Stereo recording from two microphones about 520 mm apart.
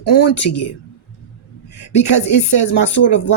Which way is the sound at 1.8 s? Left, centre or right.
Left.